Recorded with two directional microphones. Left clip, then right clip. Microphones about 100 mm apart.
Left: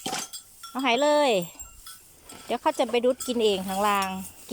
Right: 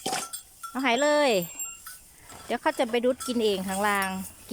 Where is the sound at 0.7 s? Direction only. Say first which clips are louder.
Left 1 dB; centre (ahead or behind).